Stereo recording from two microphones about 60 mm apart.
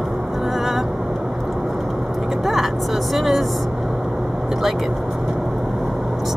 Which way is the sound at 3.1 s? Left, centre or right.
Centre.